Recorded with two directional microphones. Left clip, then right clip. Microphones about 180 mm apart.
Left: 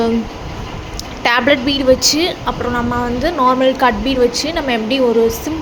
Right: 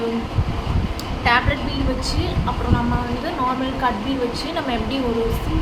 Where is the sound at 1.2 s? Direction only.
50° left (ahead or behind).